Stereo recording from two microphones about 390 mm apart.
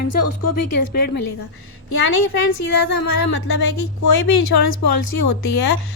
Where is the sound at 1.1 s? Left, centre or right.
Left.